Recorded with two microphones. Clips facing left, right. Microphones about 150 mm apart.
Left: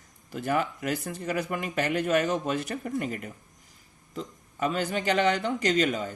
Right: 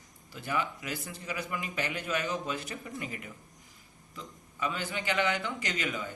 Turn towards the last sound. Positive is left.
turn(degrees=45)  # may be behind; listen again after turning